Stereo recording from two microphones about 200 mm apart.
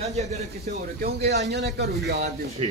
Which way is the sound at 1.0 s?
55° right (ahead or behind).